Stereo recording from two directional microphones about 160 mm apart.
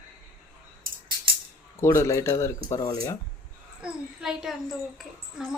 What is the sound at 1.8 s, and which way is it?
Speech, 15° left (ahead or behind).